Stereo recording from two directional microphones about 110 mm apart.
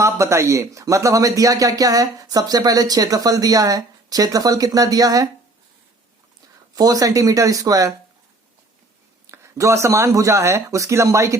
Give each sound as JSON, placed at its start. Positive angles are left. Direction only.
{"t": 0.0, "sound": "speech", "side_deg": -25}
{"t": 6.7, "sound": "speech", "side_deg": -35}
{"t": 9.2, "sound": "speech", "side_deg": -25}